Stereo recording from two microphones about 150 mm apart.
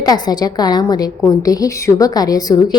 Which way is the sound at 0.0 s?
25° left (ahead or behind).